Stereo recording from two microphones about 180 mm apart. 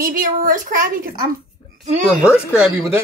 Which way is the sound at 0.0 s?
50° right (ahead or behind).